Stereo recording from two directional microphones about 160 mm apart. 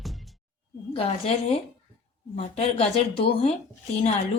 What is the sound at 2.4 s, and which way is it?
A woman's voice, 40° left (ahead or behind).